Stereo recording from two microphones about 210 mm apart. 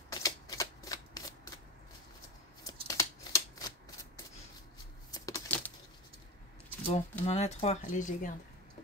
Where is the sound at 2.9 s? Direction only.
15° left (ahead or behind).